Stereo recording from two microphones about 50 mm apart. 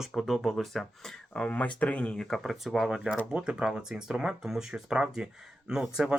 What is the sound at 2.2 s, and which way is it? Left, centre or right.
Speech, centre.